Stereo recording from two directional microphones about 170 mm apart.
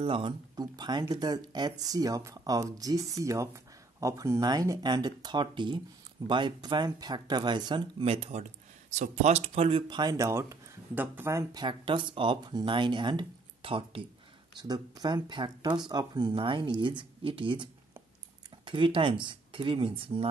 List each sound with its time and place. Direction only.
0.0 s speech: 30° right (ahead or behind)
18.7 s speech: 30° right (ahead or behind)